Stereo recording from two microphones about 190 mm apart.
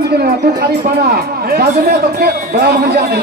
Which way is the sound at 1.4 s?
55° right (ahead or behind).